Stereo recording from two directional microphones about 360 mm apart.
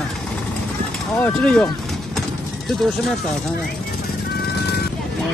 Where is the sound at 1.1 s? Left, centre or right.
Centre.